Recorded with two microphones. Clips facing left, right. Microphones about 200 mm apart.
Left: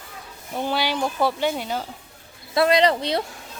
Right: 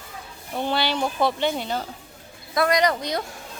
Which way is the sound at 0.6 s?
10° left (ahead or behind).